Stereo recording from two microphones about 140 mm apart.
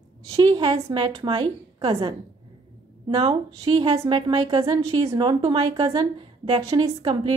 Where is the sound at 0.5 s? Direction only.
30° right (ahead or behind).